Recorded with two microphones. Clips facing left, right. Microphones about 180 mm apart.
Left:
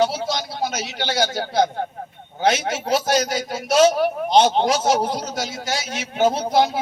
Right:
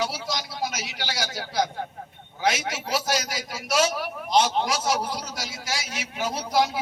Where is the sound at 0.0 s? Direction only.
25° left (ahead or behind).